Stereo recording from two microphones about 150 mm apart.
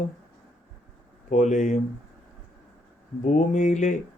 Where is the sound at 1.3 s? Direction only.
55° left (ahead or behind).